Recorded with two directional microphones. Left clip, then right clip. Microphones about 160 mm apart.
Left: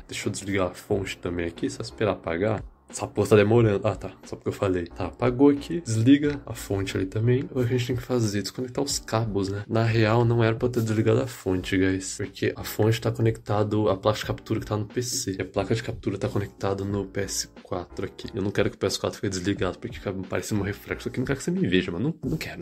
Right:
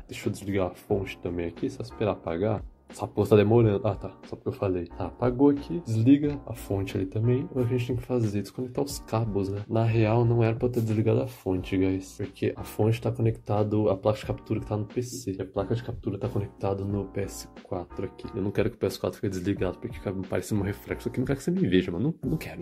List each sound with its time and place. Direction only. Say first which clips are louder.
0.1 s speech: left 2 dB; 5° right (ahead or behind)
15.7 s speech: left 4 dB; 15° left (ahead or behind); by 22.5 s 15° right (ahead or behind)